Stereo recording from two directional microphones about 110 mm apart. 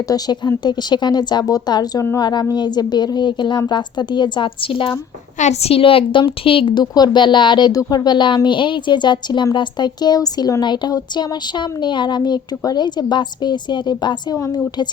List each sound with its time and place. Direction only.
0.1 s a woman's voice: 40° left (ahead or behind)
5.4 s a woman's voice: 80° left; by 14.3 s 40° left (ahead or behind)
14.3 s a woman's voice: 30° left (ahead or behind)